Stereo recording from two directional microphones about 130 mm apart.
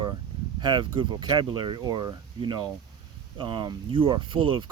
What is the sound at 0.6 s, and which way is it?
Speech, 40° right (ahead or behind).